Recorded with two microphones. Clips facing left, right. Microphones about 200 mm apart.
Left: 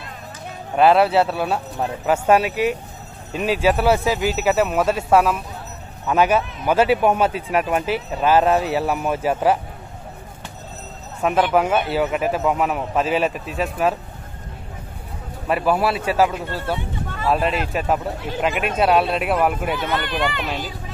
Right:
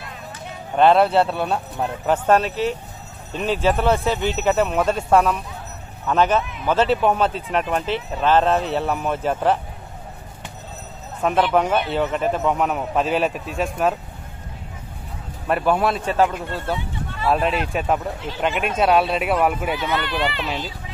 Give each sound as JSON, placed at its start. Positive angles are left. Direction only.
{"t": 0.7, "sound": "speech", "side_deg": 5}
{"t": 11.1, "sound": "speech", "side_deg": 5}
{"t": 15.4, "sound": "speech", "side_deg": 5}
{"t": 19.8, "sound": "speech", "side_deg": 50}